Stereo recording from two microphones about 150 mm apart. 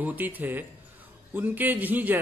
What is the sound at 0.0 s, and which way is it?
Speech, 10° right (ahead or behind).